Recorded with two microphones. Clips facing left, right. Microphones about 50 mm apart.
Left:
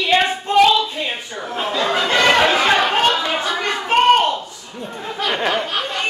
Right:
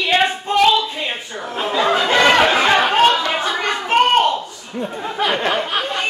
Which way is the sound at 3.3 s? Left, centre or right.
Centre.